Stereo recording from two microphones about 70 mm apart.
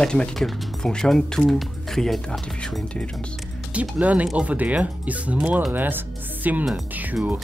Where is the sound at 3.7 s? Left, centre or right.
Right.